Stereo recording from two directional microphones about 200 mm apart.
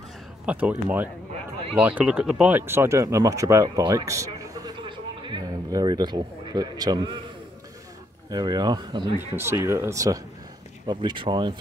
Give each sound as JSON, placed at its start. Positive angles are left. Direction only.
{"t": 0.5, "sound": "speech", "side_deg": -5}
{"t": 8.3, "sound": "speech", "side_deg": -20}